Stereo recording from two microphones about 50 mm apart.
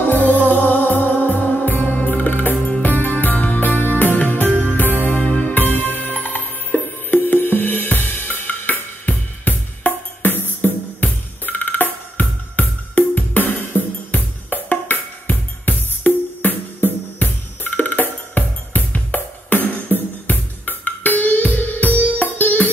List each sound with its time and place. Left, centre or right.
0.0 s music: left